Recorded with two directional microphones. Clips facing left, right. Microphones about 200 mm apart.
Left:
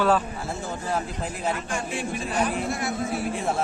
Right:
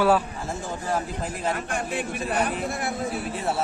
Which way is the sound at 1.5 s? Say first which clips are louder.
Right 2 dB; 55° right (ahead or behind).